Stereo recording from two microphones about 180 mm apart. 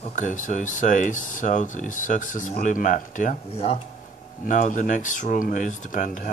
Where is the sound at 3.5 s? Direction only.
35° left (ahead or behind).